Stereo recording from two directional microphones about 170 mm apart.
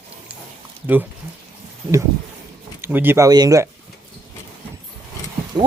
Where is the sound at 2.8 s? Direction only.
10° right (ahead or behind).